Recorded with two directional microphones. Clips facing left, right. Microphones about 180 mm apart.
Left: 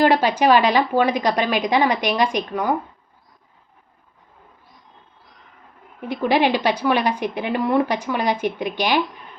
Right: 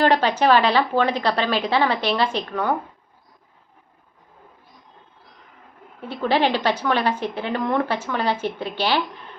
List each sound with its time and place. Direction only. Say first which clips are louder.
0.0 s speech: left 2 dB; 10° left (ahead or behind)
6.0 s speech: left 2 dB; 15° left (ahead or behind)